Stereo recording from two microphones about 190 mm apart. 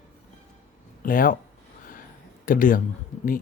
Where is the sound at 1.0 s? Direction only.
45° left (ahead or behind).